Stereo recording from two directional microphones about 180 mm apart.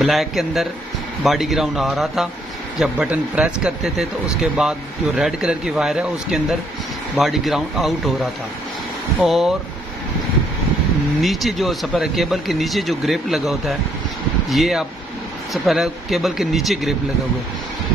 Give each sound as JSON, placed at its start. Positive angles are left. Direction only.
{"t": 0.0, "sound": "speech", "side_deg": 0}
{"t": 11.1, "sound": "speech", "side_deg": 0}